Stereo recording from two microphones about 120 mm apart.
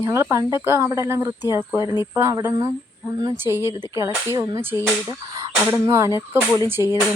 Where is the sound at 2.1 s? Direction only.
20° right (ahead or behind).